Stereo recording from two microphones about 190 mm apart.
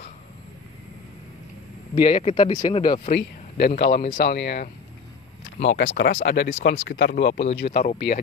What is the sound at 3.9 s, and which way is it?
Speech, 30° left (ahead or behind).